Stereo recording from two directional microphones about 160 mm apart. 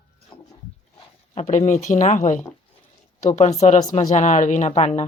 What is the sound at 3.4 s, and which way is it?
Speech, 45° left (ahead or behind).